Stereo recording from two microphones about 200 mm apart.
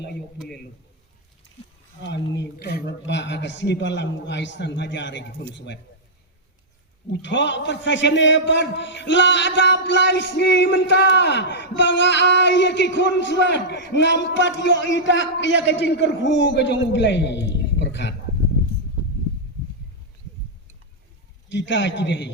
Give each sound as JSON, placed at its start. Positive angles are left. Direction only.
{"t": 0.3, "sound": "a sound", "side_deg": 5}
{"t": 2.0, "sound": "a man's voice", "side_deg": 60}
{"t": 7.1, "sound": "a man's voice", "side_deg": 65}
{"t": 21.5, "sound": "a man's voice", "side_deg": 65}